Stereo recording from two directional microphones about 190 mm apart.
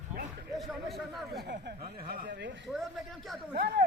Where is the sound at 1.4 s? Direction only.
55° right (ahead or behind).